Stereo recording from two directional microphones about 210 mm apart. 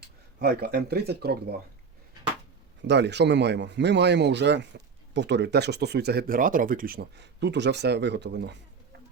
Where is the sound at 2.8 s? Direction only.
55° right (ahead or behind).